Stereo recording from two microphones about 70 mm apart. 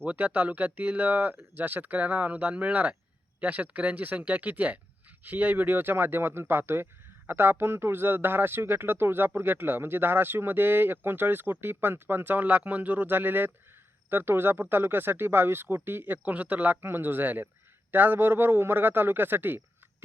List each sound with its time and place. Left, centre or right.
0.0 s speech: centre